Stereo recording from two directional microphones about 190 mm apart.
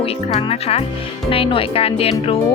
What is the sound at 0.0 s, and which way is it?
Speech, 30° left (ahead or behind).